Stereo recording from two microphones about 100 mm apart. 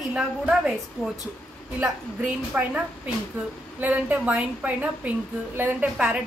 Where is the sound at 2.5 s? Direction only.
15° right (ahead or behind).